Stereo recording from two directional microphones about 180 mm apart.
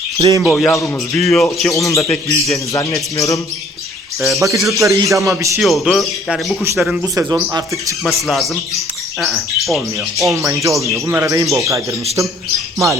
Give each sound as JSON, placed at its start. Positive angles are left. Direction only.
{"t": 0.2, "sound": "speech", "side_deg": -20}
{"t": 0.4, "sound": "speech", "side_deg": 0}
{"t": 1.7, "sound": "speech", "side_deg": 15}
{"t": 4.4, "sound": "speech", "side_deg": -15}
{"t": 5.5, "sound": "speech", "side_deg": 0}
{"t": 7.2, "sound": "speech", "side_deg": -20}
{"t": 8.0, "sound": "speech", "side_deg": 0}
{"t": 10.4, "sound": "speech", "side_deg": -15}